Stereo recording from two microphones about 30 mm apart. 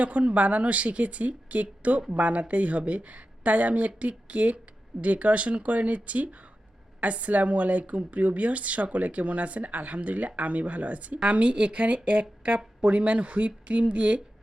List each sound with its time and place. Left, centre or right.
0.0 s speech: right